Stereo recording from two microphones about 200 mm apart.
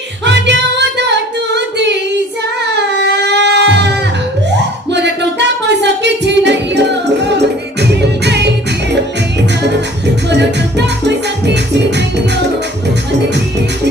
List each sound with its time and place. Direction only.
2.9 s music: 55° right (ahead or behind)
10.2 s music: 60° right (ahead or behind)